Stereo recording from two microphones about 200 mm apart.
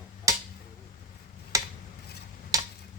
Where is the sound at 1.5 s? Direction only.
15° right (ahead or behind).